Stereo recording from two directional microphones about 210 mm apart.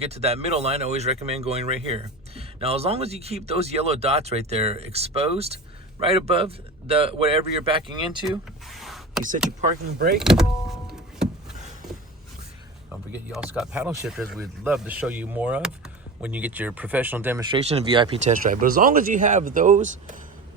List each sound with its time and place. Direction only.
0.0 s speech: 30° right (ahead or behind)
8.6 s a sound: centre (ahead or behind)
9.6 s speech: 40° right (ahead or behind)
10.2 s vehicle: centre (ahead or behind)
12.9 s speech: 5° right (ahead or behind)
17.4 s speech: 25° right (ahead or behind)
18.3 s speech: 40° right (ahead or behind)